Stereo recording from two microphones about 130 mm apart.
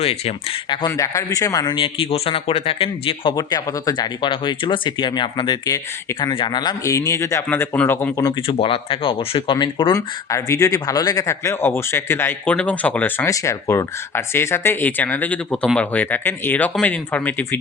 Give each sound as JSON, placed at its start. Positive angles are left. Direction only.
{"t": 0.0, "sound": "speech", "side_deg": 50}
{"t": 0.9, "sound": "speech", "side_deg": 25}
{"t": 1.7, "sound": "speech", "side_deg": 45}
{"t": 3.3, "sound": "speech", "side_deg": 30}
{"t": 8.4, "sound": "speech", "side_deg": 45}
{"t": 9.9, "sound": "speech", "side_deg": 25}